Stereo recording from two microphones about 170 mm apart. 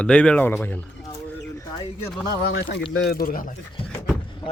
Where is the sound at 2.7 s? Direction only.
85° left; by 3.5 s 55° left (ahead or behind).